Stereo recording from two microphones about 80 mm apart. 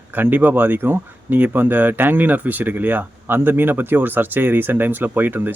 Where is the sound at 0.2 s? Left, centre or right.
Right.